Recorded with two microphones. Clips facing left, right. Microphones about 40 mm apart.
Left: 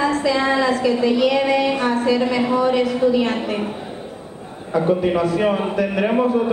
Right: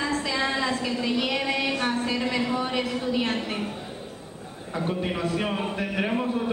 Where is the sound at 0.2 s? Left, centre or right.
Left.